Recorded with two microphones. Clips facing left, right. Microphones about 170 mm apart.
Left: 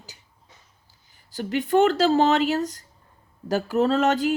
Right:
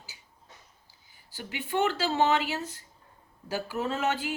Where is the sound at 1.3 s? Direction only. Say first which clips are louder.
Left 10 dB; 40° left (ahead or behind).